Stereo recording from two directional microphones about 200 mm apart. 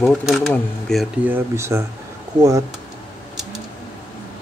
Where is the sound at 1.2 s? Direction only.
10° right (ahead or behind).